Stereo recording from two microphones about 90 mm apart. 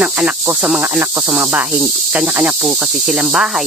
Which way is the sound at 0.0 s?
15° right (ahead or behind).